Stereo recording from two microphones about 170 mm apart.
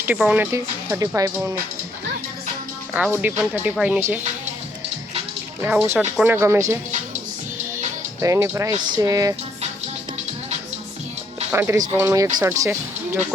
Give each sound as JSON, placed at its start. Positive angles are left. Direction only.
{"t": 0.0, "sound": "speech", "side_deg": -5}
{"t": 0.5, "sound": "speech", "side_deg": -15}
{"t": 2.9, "sound": "speech", "side_deg": -10}
{"t": 5.6, "sound": "speech", "side_deg": -10}
{"t": 8.2, "sound": "speech", "side_deg": -15}
{"t": 11.5, "sound": "speech", "side_deg": -15}